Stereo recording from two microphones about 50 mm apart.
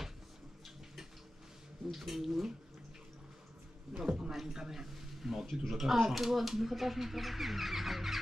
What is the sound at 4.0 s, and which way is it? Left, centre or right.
A man's voice, centre.